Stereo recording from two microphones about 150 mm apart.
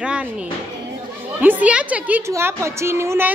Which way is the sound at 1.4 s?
10° right (ahead or behind).